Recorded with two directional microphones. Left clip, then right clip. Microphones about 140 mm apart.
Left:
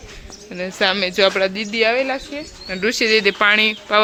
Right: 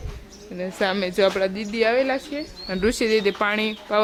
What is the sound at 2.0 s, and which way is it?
Speech, 25° right (ahead or behind).